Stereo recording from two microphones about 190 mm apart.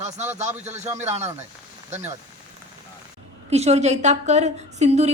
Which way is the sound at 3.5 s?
35° right (ahead or behind).